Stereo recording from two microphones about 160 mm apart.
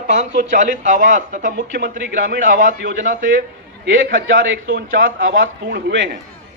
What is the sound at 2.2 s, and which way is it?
A man's voice, 65° right (ahead or behind).